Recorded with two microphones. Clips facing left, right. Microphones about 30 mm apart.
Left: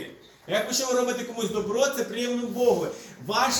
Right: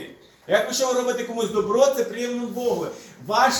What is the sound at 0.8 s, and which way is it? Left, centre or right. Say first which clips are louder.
Speech: right 3 dB; centre.